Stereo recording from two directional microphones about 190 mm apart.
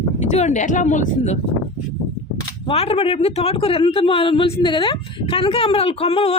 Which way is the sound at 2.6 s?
30° left (ahead or behind).